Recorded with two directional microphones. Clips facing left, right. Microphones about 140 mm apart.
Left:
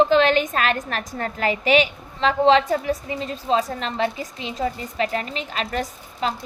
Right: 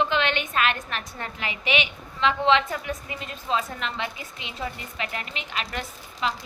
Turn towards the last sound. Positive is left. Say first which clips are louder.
# left 4 dB
turn(degrees=40)  # may be behind; listen again after turning